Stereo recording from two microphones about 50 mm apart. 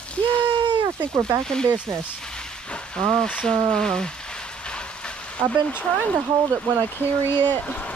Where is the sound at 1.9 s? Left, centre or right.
Centre.